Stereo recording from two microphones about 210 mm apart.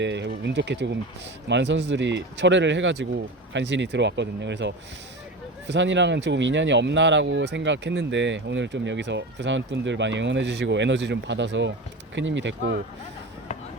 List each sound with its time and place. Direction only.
0.0 s speech: 55° right (ahead or behind)